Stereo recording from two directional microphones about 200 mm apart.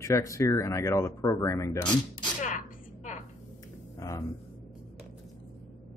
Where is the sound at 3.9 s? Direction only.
15° left (ahead or behind).